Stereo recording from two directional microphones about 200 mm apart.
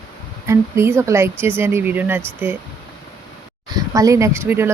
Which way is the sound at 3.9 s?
15° right (ahead or behind).